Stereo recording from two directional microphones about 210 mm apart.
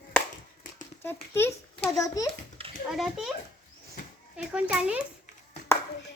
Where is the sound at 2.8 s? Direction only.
Centre (ahead or behind).